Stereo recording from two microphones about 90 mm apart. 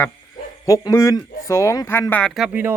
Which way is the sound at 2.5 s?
25° right (ahead or behind).